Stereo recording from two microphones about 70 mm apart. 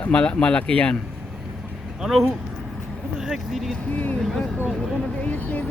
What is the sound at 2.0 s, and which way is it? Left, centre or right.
Speech, centre.